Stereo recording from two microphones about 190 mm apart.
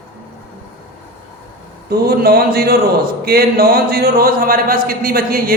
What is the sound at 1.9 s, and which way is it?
A man's voice, 55° right (ahead or behind).